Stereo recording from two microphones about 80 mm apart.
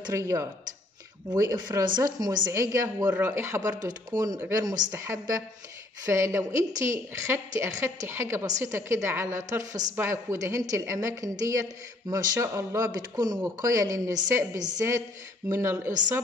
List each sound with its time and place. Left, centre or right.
0.1 s a woman's voice: right
1.3 s speech: right
2.5 s a woman's voice: right
3.8 s speech: right
4.4 s a woman's voice: right
8.5 s a woman's voice: right
13.4 s a woman's voice: right